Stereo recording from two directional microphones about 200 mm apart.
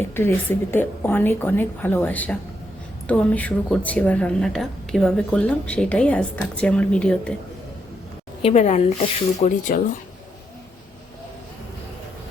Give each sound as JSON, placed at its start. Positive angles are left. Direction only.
{"t": 0.2, "sound": "a woman's voice", "side_deg": 10}
{"t": 8.4, "sound": "speech", "side_deg": 30}